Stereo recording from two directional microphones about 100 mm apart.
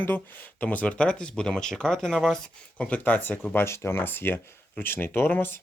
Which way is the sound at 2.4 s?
15° left (ahead or behind).